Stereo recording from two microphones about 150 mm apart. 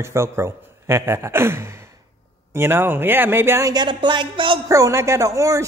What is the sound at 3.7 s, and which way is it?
Speech, 30° right (ahead or behind).